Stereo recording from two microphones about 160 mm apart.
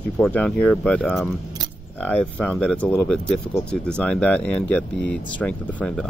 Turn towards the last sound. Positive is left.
turn(degrees=5)  # may be behind; listen again after turning